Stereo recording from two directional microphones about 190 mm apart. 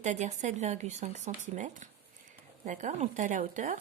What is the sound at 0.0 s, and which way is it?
A woman's voice, 40° right (ahead or behind).